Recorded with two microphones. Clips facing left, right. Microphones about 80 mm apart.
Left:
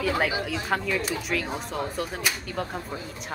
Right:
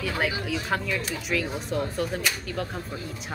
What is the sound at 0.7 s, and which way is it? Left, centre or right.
Speech, centre.